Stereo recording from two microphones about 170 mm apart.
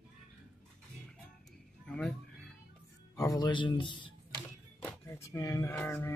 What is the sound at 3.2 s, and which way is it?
Speech, 20° left (ahead or behind).